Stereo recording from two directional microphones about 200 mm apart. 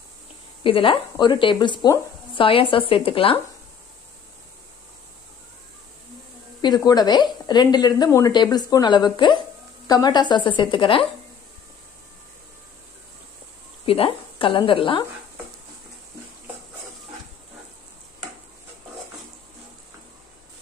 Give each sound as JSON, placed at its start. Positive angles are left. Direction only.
{"t": 0.7, "sound": "speech", "side_deg": 25}
{"t": 6.6, "sound": "speech", "side_deg": 20}
{"t": 13.8, "sound": "a woman's voice", "side_deg": 25}